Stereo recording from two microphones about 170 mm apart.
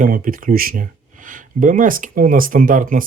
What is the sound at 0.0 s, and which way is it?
Speech, 55° right (ahead or behind).